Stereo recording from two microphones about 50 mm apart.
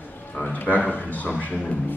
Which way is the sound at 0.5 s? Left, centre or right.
Left.